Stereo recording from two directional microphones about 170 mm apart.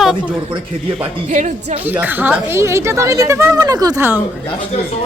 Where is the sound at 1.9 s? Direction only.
10° right (ahead or behind).